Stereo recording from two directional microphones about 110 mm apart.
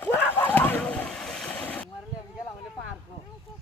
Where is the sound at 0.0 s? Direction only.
15° left (ahead or behind).